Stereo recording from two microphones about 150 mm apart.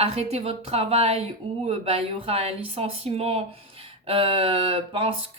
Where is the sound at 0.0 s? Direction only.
45° right (ahead or behind).